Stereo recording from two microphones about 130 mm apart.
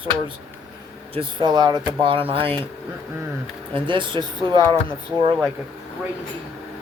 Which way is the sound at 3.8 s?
40° right (ahead or behind).